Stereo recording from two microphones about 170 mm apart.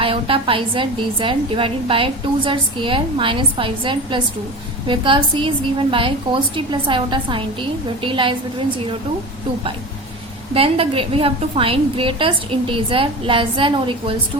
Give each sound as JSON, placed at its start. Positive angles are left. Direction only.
{"t": 0.0, "sound": "a woman's voice", "side_deg": -30}
{"t": 10.5, "sound": "a woman's voice", "side_deg": -35}